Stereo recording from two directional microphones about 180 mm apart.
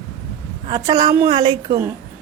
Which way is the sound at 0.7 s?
20° right (ahead or behind).